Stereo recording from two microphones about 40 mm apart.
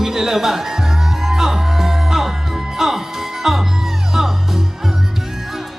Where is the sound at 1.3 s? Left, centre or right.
Centre.